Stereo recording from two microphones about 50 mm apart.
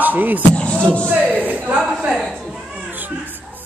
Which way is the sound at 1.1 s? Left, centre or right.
Right.